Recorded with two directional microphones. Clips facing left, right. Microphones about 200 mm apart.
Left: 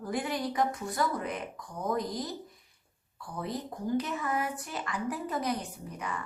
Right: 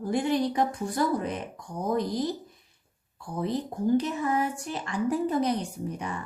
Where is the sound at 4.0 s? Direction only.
25° right (ahead or behind).